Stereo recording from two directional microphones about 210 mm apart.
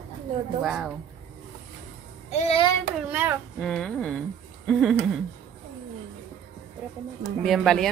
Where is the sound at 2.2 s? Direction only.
30° left (ahead or behind).